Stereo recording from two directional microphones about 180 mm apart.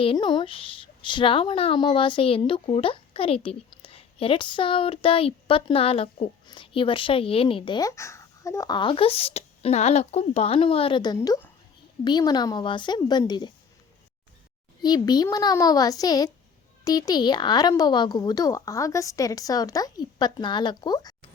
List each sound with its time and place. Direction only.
0.0 s a woman's voice: 30° left (ahead or behind)
14.8 s a woman's voice: 20° left (ahead or behind)